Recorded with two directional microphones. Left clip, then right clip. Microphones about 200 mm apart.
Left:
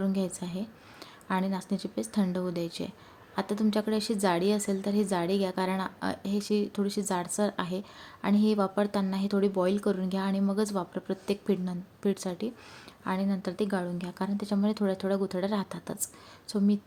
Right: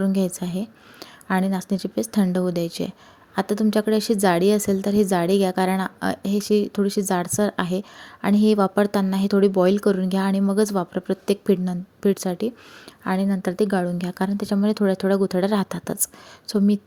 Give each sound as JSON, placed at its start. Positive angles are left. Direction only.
{"t": 0.0, "sound": "a woman's voice", "side_deg": -35}